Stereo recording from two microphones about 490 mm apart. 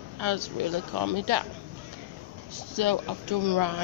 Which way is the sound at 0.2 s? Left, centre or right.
Right.